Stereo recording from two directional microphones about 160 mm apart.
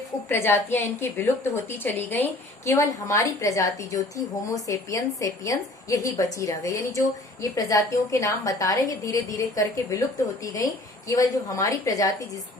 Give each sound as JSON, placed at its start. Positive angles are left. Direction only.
{"t": 0.3, "sound": "a woman's voice", "side_deg": 15}